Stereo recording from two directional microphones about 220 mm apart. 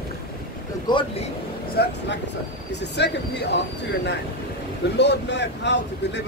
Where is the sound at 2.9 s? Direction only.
50° left (ahead or behind).